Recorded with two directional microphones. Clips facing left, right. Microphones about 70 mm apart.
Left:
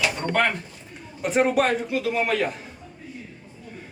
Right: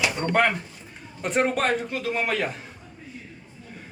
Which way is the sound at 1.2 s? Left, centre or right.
Centre.